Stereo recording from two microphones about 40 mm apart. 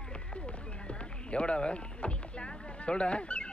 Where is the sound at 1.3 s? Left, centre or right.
Left.